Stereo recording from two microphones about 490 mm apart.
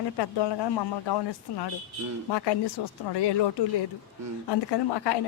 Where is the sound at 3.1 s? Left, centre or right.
Left.